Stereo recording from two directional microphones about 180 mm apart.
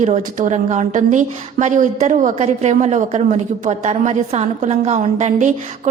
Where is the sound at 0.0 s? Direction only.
40° right (ahead or behind).